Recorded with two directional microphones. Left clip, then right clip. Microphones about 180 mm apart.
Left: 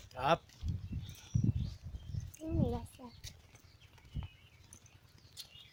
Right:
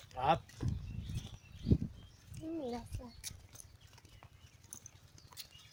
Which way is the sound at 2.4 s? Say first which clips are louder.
Left 1 dB; 40° left (ahead or behind).